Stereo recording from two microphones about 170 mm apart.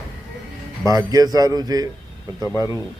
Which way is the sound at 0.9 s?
20° right (ahead or behind).